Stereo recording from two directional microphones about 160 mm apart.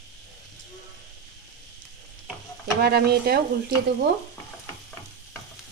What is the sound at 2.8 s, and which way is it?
Speech, 80° right.